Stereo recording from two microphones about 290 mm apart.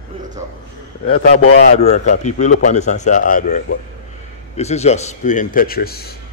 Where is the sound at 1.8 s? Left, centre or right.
Left.